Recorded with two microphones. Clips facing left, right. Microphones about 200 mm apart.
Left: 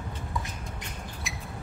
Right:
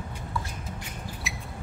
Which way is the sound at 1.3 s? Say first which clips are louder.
Right 2 dB; centre (ahead or behind).